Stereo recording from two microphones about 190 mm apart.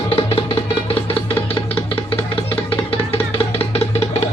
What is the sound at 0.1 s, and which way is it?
Music, 30° left (ahead or behind).